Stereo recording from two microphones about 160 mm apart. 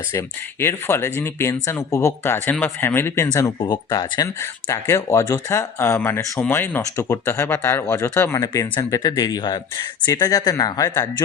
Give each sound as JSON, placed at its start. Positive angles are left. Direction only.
{"t": 0.1, "sound": "speech", "side_deg": 15}